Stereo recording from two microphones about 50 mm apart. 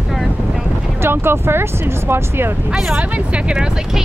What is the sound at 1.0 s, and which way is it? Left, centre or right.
Speech, right.